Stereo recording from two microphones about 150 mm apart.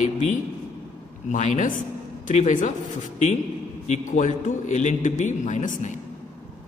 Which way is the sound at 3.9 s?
55° left (ahead or behind).